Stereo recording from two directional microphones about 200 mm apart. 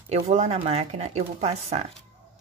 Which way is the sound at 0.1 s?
35° right (ahead or behind).